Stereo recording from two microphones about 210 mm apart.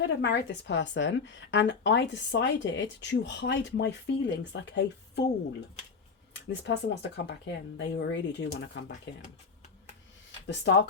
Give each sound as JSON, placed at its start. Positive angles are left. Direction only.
{"t": 0.0, "sound": "a woman's voice", "side_deg": 55}
{"t": 6.5, "sound": "a woman's voice", "side_deg": 55}
{"t": 10.4, "sound": "a woman's voice", "side_deg": 55}